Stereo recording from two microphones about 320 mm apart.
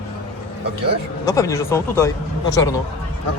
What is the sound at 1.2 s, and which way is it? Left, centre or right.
Speech, centre.